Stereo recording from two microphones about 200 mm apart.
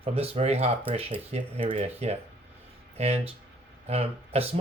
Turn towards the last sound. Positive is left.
turn(degrees=-30)  # may be behind; listen again after turning